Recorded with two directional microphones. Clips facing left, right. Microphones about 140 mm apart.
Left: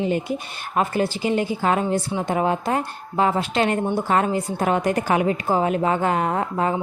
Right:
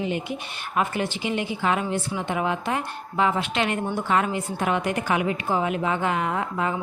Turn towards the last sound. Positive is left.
turn(degrees=40)  # may be behind; listen again after turning